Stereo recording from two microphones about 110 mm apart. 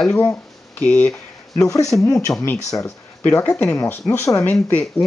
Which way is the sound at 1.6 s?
30° left (ahead or behind).